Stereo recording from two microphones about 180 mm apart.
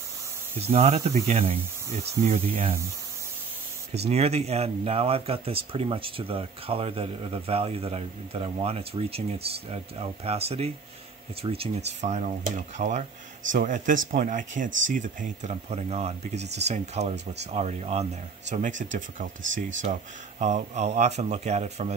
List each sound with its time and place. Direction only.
0.6 s speech: 35° right (ahead or behind)
4.1 s speech: 35° right (ahead or behind)
19.4 s speech: 90° right
19.8 s speech: 40° right (ahead or behind)